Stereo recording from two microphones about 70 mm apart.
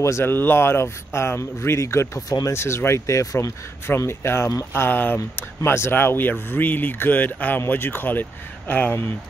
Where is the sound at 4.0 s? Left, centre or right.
Left.